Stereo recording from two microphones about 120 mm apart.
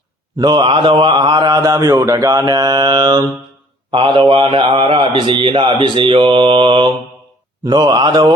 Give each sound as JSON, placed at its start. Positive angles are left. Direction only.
{"t": 0.3, "sound": "mantra", "side_deg": -40}
{"t": 3.9, "sound": "a man's voice", "side_deg": -45}
{"t": 7.6, "sound": "mantra", "side_deg": -35}